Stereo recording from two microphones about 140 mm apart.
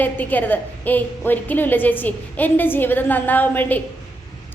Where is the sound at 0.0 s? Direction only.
10° left (ahead or behind).